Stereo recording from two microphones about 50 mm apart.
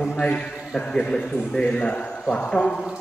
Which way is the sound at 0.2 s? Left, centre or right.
Left.